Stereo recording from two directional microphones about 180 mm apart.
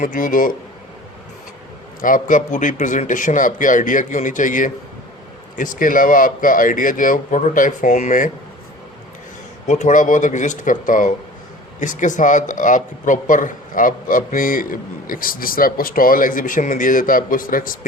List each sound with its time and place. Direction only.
0.0 s speech: 45° left (ahead or behind)
2.0 s speech: 50° left (ahead or behind)
9.6 s speech: 40° left (ahead or behind)